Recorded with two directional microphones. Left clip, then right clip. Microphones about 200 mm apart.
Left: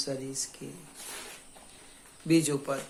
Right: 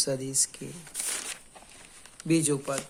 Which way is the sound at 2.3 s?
35° right (ahead or behind).